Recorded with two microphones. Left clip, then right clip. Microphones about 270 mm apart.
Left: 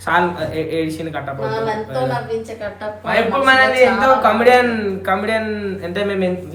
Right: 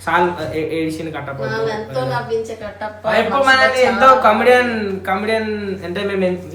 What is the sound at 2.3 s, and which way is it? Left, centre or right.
Speech, left.